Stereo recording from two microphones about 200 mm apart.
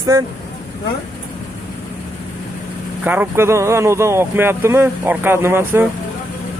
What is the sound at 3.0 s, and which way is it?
Speech, 10° right (ahead or behind).